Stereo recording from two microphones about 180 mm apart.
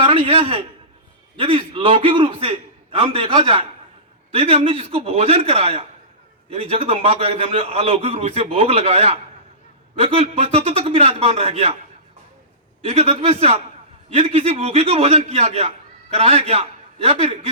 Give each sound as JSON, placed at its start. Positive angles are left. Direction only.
{"t": 0.0, "sound": "a man's voice", "side_deg": -30}
{"t": 12.9, "sound": "a man's voice", "side_deg": -35}